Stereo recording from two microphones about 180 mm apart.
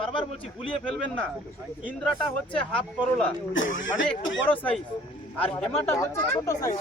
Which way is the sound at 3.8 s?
90° left.